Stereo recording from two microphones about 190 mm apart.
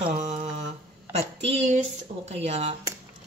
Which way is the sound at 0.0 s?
35° right (ahead or behind).